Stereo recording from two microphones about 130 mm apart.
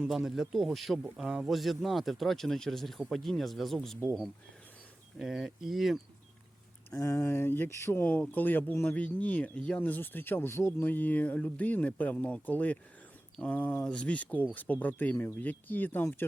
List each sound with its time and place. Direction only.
0.1 s speech: centre (ahead or behind)
5.2 s speech: 5° right (ahead or behind)
6.9 s speech: 25° left (ahead or behind)